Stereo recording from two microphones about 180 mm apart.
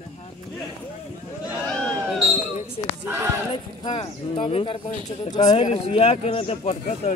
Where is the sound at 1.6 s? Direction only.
5° left (ahead or behind).